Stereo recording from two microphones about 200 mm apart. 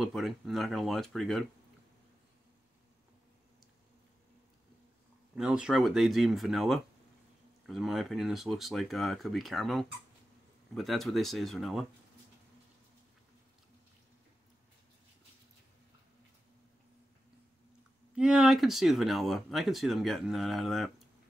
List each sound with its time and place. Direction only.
0.0 s speech: centre (ahead or behind)
5.3 s speech: 5° right (ahead or behind)
18.1 s speech: 5° right (ahead or behind)